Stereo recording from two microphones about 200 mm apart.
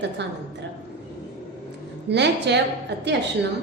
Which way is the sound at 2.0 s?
60° right (ahead or behind).